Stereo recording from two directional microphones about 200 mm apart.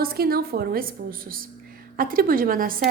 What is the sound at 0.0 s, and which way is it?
A woman's voice, 50° right (ahead or behind).